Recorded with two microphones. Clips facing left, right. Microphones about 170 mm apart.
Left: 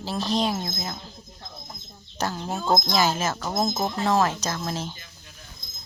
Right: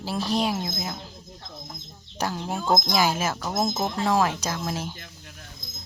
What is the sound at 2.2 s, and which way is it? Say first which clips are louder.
Speech: even; 10° right (ahead or behind).